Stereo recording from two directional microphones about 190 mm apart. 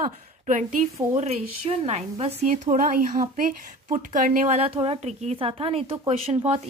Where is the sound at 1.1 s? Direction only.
35° right (ahead or behind).